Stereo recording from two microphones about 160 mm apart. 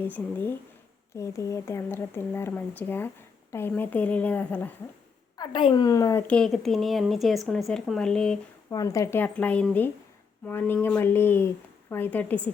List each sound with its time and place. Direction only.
0.0 s speech: 10° left (ahead or behind)
5.4 s speech: 30° left (ahead or behind)
6.2 s a woman's voice: 5° left (ahead or behind)
8.7 s speech: 20° left (ahead or behind)